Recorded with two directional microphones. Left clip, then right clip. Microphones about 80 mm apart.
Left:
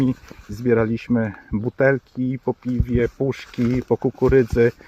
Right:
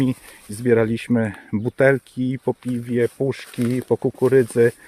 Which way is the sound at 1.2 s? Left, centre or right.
Right.